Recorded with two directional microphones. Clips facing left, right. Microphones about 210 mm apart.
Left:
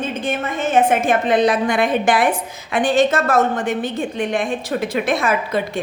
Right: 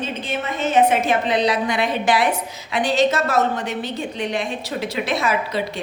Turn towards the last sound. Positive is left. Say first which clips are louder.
# left 3 dB
turn(degrees=50)  # may be behind; listen again after turning